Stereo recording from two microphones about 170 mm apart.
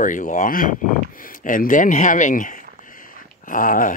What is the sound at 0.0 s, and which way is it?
Speech, 50° left (ahead or behind).